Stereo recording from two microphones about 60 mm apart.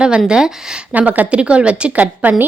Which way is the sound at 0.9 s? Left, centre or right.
Right.